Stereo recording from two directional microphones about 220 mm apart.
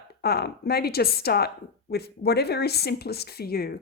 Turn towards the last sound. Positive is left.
turn(degrees=45)  # may be behind; listen again after turning